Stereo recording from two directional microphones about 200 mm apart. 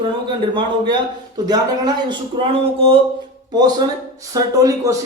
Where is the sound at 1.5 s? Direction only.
20° right (ahead or behind).